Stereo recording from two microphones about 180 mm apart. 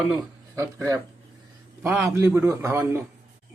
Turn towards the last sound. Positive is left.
turn(degrees=-15)  # may be behind; listen again after turning